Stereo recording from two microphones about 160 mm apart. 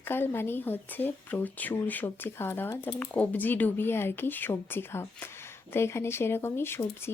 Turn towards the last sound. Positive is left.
turn(degrees=15)  # may be behind; listen again after turning